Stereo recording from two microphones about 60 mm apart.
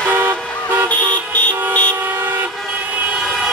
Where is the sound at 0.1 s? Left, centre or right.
Right.